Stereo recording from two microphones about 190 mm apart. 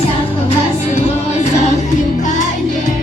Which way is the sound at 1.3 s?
35° left (ahead or behind).